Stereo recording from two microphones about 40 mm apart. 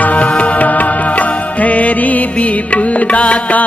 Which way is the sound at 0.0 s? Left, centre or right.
Left.